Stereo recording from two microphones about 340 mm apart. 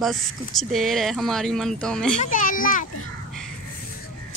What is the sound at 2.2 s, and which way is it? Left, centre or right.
Speech, left.